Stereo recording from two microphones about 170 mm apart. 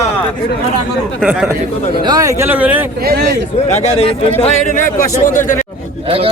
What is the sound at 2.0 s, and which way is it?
Speech, 20° right (ahead or behind).